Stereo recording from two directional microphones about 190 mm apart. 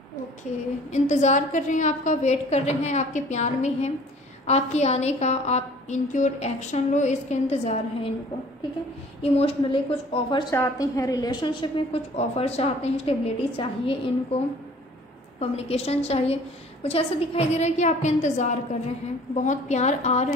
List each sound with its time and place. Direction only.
0.9 s a woman's voice: 40° left (ahead or behind)
9.2 s a woman's voice: 30° left (ahead or behind)